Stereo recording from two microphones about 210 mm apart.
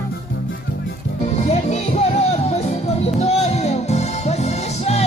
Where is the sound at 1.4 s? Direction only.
35° left (ahead or behind).